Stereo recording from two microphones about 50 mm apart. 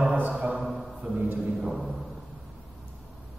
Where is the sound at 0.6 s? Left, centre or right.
Centre.